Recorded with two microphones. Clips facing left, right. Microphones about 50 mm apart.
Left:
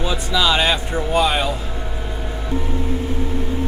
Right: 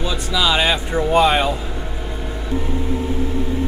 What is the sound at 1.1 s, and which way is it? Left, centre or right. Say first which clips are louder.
Speech: right 3 dB; right.